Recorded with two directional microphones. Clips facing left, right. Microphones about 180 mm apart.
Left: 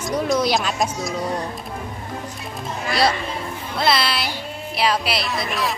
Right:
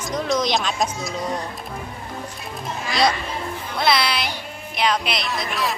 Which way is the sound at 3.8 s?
Centre (ahead or behind).